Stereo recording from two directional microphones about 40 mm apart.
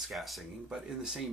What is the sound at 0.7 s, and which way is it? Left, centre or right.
Speech, centre.